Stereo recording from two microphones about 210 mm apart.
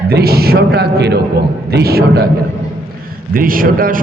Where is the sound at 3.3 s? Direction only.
40° right (ahead or behind).